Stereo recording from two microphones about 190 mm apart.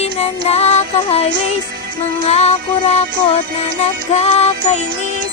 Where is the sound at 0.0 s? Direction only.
35° left (ahead or behind).